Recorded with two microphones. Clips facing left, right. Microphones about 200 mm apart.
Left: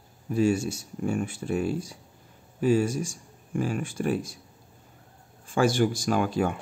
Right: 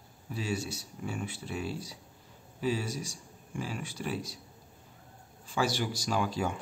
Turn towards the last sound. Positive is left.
turn(degrees=55)  # may be behind; listen again after turning